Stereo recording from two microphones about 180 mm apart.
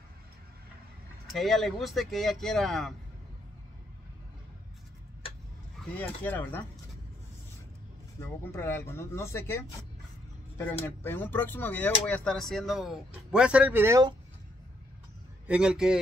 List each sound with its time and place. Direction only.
1.3 s speech: centre (ahead or behind)
5.9 s speech: 10° left (ahead or behind)
8.5 s speech: 10° left (ahead or behind); by 14.1 s 15° right (ahead or behind)
15.4 s speech: 5° right (ahead or behind)